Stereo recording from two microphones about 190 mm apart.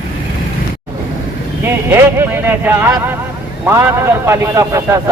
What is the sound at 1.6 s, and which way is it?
A man's voice, 10° right (ahead or behind).